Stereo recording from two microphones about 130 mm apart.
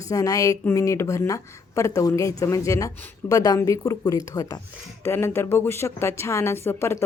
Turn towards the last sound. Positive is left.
turn(degrees=20)  # may be behind; listen again after turning